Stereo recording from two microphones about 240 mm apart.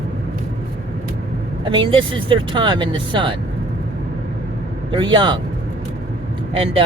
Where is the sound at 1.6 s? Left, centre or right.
Centre.